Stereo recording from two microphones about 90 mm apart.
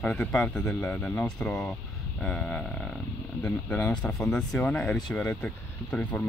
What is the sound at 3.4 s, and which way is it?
Speech, 20° left (ahead or behind).